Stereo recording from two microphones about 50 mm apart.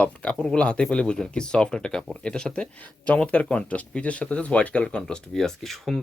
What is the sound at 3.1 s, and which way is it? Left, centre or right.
Speech, left.